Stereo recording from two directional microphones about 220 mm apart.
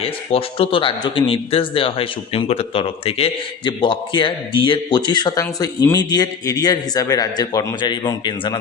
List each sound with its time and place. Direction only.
0.0 s speech: 25° left (ahead or behind)